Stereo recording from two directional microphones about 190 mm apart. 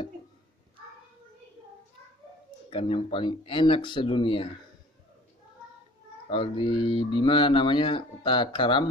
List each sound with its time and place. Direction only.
2.7 s speech: 30° left (ahead or behind)
6.2 s speech: 25° left (ahead or behind)